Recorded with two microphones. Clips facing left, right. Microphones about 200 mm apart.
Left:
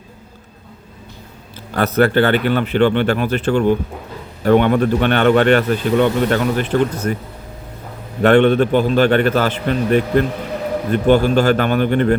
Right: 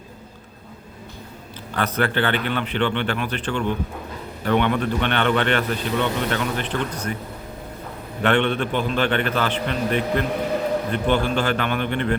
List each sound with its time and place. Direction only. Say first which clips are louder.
1.7 s a man's voice: left 8 dB; 40° left (ahead or behind)
8.2 s a man's voice: left 9 dB; 40° left (ahead or behind)